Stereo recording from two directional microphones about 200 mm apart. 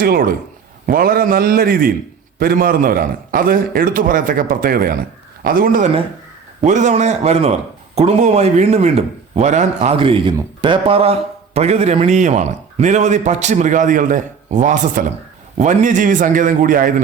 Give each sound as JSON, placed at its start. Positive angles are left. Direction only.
{"t": 0.0, "sound": "a man's voice", "side_deg": -45}